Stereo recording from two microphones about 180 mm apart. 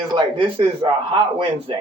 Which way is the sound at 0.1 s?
25° right (ahead or behind).